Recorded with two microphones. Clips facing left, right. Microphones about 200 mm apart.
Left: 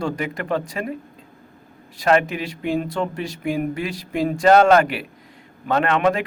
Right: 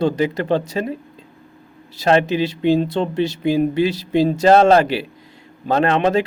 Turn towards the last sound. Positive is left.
turn(degrees=-30)  # may be behind; listen again after turning